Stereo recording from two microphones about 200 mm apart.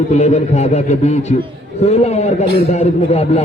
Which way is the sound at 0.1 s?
35° left (ahead or behind).